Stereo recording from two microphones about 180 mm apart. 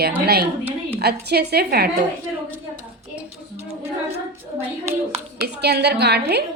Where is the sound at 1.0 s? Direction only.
65° right (ahead or behind).